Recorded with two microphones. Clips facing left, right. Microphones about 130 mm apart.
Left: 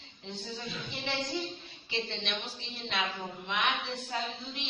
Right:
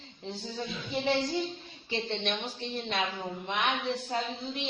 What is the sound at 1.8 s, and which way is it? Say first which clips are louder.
A woman's voice: right 4 dB; 40° right (ahead or behind).